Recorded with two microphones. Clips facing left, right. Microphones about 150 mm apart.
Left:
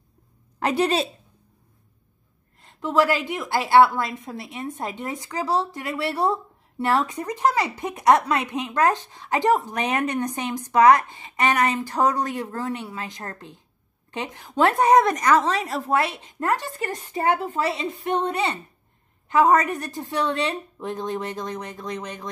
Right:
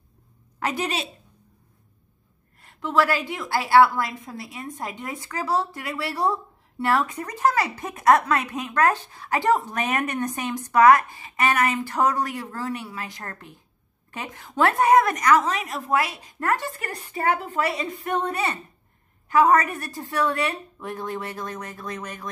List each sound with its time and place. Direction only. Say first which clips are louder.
0.7 s a woman's voice: left 6 dB; 35° left (ahead or behind)
2.6 s a woman's voice: left 1 dB; 20° left (ahead or behind)